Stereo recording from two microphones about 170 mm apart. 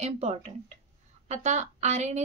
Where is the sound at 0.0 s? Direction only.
40° right (ahead or behind).